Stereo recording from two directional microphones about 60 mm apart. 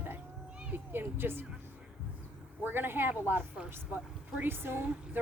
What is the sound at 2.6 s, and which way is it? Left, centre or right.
Speech, right.